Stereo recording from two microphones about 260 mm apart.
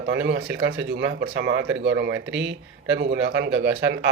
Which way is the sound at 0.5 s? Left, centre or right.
Right.